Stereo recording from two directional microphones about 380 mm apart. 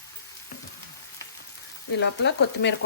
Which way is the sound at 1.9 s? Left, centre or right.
Left.